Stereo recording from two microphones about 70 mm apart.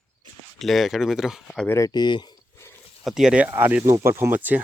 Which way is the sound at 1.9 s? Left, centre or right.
Left.